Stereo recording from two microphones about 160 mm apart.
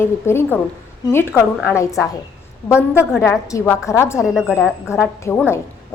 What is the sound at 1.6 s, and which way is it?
Speech, 20° left (ahead or behind).